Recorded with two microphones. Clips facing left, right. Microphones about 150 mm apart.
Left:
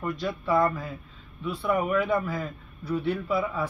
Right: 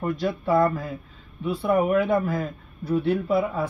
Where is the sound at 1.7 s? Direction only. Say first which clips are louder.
Right 4 dB; 50° right (ahead or behind).